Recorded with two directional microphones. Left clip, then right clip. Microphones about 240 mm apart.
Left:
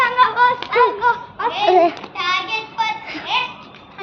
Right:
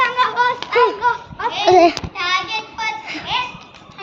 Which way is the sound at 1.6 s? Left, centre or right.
Right.